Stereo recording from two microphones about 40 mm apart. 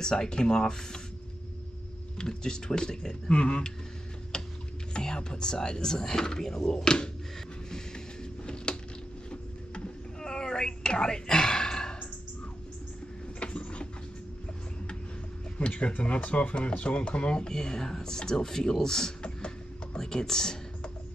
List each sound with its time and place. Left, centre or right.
0.0 s speech: centre
2.1 s speech: centre
4.3 s a sound: left
4.9 s speech: left
8.7 s a sound: left
9.3 s whispering: left
13.4 s a sound: left
15.7 s speech: left; by 19.1 s centre
19.2 s music: left
20.0 s speech: centre